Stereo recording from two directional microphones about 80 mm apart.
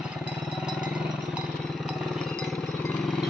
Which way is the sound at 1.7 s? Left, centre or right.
Centre.